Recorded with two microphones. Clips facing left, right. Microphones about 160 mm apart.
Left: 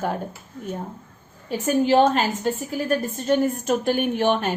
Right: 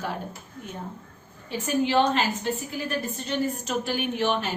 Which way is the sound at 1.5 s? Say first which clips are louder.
Left 5 dB; 40° left (ahead or behind).